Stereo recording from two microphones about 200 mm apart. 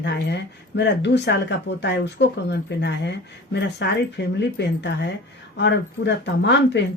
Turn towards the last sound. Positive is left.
turn(degrees=60)  # may be behind; listen again after turning